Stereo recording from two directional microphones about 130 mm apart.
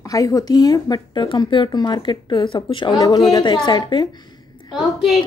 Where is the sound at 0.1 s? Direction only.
25° left (ahead or behind).